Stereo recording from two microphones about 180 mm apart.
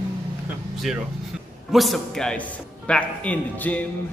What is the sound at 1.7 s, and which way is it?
Speech, centre (ahead or behind).